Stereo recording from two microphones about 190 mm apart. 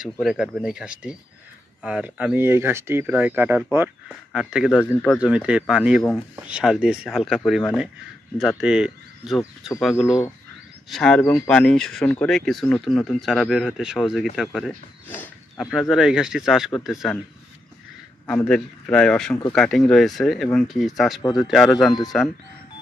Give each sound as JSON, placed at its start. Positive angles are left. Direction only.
{"t": 0.0, "sound": "a man's voice", "side_deg": -5}
{"t": 10.9, "sound": "a man's voice", "side_deg": 5}
{"t": 15.0, "sound": "a man's voice", "side_deg": 10}
{"t": 18.2, "sound": "a man's voice", "side_deg": 5}
{"t": 21.2, "sound": "speech", "side_deg": 20}
{"t": 21.5, "sound": "a man's voice", "side_deg": 0}